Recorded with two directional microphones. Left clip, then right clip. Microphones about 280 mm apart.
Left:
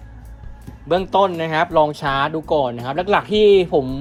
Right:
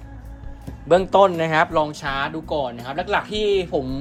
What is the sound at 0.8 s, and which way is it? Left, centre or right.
Speech, centre.